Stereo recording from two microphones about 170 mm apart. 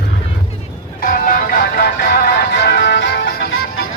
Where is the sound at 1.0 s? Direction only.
55° left (ahead or behind).